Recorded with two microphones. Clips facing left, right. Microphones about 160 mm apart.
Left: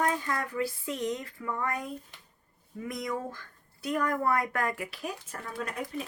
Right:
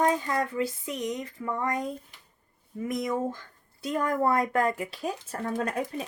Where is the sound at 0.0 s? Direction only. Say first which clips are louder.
Right 4 dB; 25° right (ahead or behind).